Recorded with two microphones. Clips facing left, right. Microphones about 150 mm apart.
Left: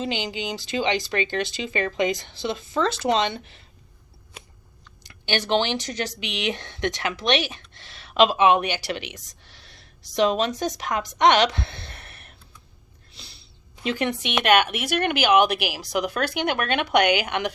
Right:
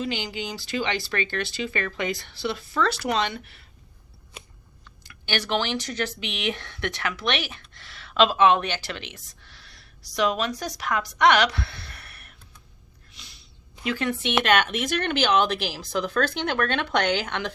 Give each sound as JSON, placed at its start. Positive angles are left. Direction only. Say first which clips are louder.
{"t": 0.0, "sound": "speech", "louder": "left 2 dB", "side_deg": 20}
{"t": 5.0, "sound": "speech", "louder": "left 3 dB", "side_deg": 20}
{"t": 13.1, "sound": "a sound", "louder": "left 3 dB", "side_deg": 30}
{"t": 13.9, "sound": "speech", "louder": "right 1 dB", "side_deg": 15}